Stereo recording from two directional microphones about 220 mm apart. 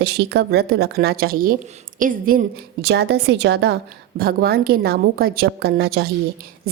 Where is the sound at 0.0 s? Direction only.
50° right (ahead or behind).